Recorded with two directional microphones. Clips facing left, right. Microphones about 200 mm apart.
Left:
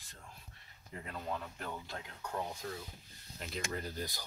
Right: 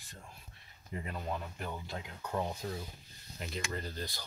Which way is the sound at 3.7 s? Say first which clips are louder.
Even; 10° left (ahead or behind).